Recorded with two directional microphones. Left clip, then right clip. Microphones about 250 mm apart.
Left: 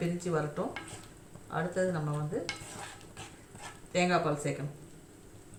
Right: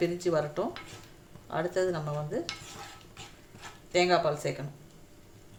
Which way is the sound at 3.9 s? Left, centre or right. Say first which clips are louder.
Right 4 dB; right.